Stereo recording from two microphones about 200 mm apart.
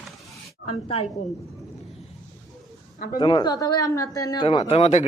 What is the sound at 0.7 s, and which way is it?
Speech, 30° left (ahead or behind).